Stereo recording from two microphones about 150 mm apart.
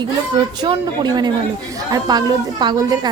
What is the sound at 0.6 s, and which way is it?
A woman's voice, 30° right (ahead or behind).